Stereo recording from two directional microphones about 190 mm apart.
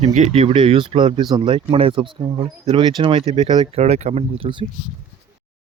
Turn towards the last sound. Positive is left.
turn(degrees=-30)  # may be behind; listen again after turning